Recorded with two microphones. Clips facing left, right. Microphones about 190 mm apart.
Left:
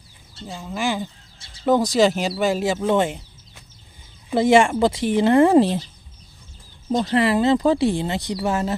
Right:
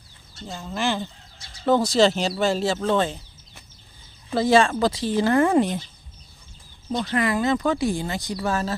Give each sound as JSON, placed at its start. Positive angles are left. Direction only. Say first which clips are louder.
{"t": 0.5, "sound": "speech", "louder": "left 1 dB", "side_deg": 10}
{"t": 7.1, "sound": "speech", "louder": "left 4 dB", "side_deg": 25}